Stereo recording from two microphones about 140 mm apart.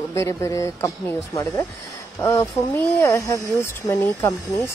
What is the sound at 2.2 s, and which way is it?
Speech, 20° left (ahead or behind).